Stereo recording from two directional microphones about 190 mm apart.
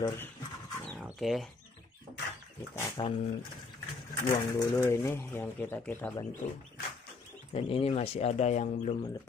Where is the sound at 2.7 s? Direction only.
15° left (ahead or behind).